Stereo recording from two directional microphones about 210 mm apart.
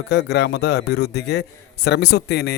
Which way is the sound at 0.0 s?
50° left (ahead or behind).